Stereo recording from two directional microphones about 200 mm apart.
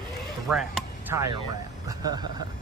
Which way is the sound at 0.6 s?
Centre (ahead or behind).